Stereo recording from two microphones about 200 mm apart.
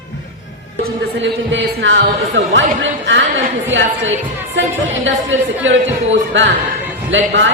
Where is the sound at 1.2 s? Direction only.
65° right (ahead or behind).